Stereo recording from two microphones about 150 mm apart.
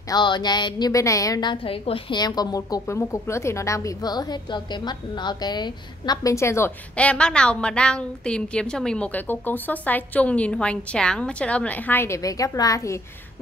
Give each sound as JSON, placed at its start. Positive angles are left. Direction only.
{"t": 0.1, "sound": "a woman's voice", "side_deg": 30}